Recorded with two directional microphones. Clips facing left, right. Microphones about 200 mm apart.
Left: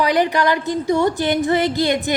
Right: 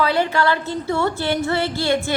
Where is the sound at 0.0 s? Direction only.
15° left (ahead or behind).